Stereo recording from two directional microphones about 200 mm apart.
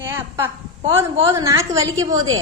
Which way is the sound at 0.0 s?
10° right (ahead or behind).